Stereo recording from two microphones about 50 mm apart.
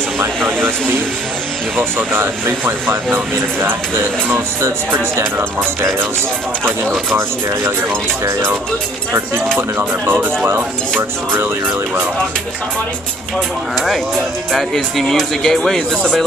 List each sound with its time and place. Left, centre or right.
1.8 s speech: right
4.6 s speech: right
9.6 s speech: right
14.5 s speech: centre